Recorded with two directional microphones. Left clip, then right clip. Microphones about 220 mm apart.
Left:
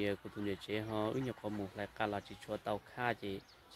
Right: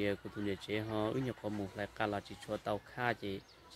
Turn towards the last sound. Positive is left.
turn(degrees=5)  # may be behind; listen again after turning